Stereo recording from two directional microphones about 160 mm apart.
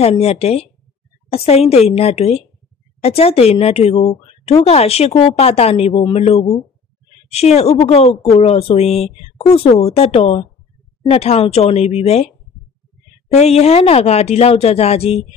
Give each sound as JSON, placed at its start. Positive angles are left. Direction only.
{"t": 0.0, "sound": "speech", "side_deg": 40}
{"t": 13.3, "sound": "speech", "side_deg": 45}